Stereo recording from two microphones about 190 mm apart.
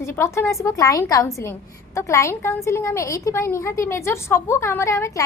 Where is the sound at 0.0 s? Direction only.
15° left (ahead or behind).